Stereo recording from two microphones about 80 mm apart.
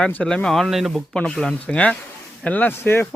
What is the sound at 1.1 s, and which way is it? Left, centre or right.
Speech, centre.